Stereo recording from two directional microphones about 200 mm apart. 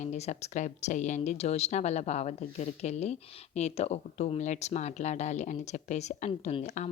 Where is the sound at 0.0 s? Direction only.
35° left (ahead or behind).